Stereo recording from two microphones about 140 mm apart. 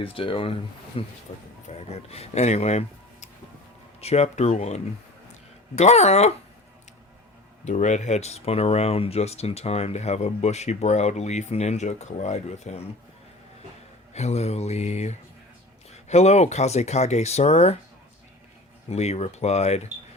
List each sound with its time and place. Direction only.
0.1 s speech: 40° left (ahead or behind)
7.6 s speech: 55° left (ahead or behind)
14.1 s speech: 50° left (ahead or behind)
18.9 s speech: 50° left (ahead or behind)